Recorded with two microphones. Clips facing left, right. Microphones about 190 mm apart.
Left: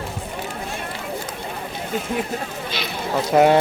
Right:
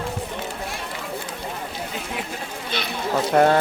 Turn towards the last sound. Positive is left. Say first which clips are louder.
# left 2 dB
turn(degrees=5)  # may be behind; listen again after turning